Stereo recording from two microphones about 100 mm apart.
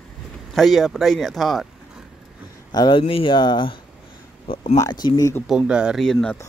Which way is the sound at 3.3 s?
50° left (ahead or behind).